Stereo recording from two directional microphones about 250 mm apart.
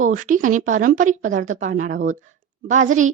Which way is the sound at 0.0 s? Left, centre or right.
Right.